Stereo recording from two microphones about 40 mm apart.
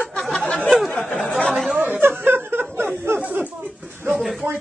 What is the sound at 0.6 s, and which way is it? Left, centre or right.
Speech, centre.